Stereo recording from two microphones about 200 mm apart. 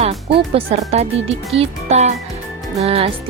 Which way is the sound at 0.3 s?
30° right (ahead or behind).